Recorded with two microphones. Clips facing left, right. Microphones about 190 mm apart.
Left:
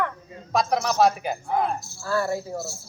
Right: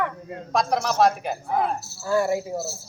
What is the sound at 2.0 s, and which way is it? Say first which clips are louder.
Speech: right 4 dB; 15° right (ahead or behind).